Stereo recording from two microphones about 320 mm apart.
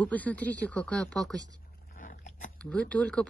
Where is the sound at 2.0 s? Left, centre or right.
Left.